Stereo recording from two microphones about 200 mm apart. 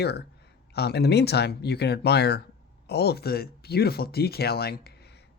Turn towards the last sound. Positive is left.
turn(degrees=55)  # may be behind; listen again after turning